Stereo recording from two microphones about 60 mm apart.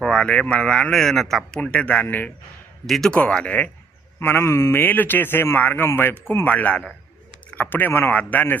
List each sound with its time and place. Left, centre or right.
0.0 s speech: centre
1.5 s speech: centre; by 2.3 s left
2.8 s a man's voice: centre
3.1 s speech: centre
4.2 s speech: left
4.7 s speech: left
6.4 s speech: left
8.1 s speech: left